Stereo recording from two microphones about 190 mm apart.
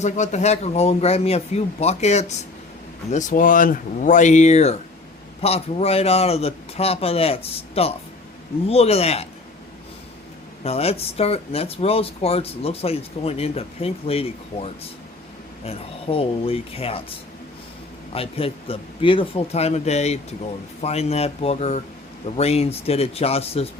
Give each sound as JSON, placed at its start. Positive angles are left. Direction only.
{"t": 0.0, "sound": "speech", "side_deg": 40}
{"t": 10.6, "sound": "speech", "side_deg": 30}
{"t": 18.1, "sound": "speech", "side_deg": 30}